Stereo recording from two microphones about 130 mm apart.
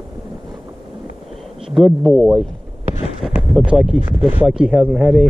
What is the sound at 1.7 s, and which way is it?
Speech, centre (ahead or behind).